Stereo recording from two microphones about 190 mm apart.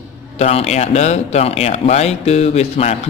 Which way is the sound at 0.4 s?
35° left (ahead or behind).